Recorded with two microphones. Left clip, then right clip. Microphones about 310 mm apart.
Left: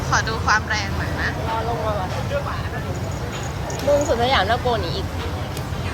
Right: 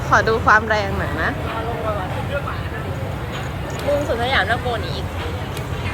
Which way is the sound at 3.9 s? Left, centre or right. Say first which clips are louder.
Even; left.